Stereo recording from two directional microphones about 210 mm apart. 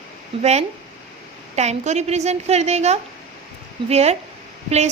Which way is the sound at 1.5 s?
35° right (ahead or behind).